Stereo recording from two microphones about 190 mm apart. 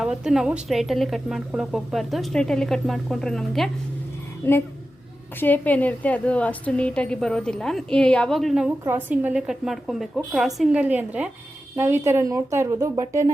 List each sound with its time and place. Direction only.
0.0 s a woman's voice: 5° right (ahead or behind)
4.4 s a woman's voice: 10° left (ahead or behind); by 13.3 s 15° right (ahead or behind)